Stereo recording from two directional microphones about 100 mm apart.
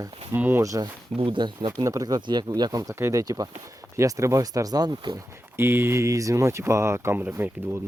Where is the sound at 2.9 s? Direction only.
25° right (ahead or behind).